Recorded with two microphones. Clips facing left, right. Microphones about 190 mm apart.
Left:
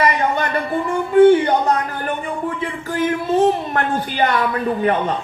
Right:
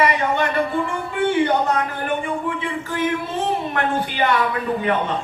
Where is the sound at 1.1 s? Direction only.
40° left (ahead or behind).